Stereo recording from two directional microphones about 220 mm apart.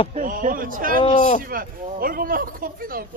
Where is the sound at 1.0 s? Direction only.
30° left (ahead or behind).